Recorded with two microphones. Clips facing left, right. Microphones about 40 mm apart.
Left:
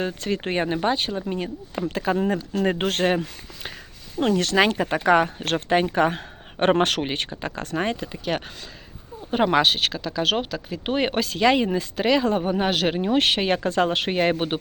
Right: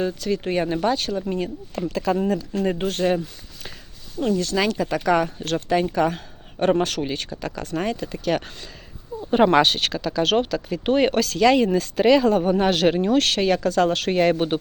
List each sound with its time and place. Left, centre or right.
0.0 s speech: left
2.6 s speech: left
4.2 s speech: left
4.5 s speech: left
8.0 s speech: centre
9.3 s speech: centre
13.1 s speech: left